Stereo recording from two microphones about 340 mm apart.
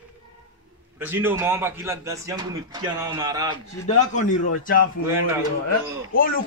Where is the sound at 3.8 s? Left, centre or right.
Left.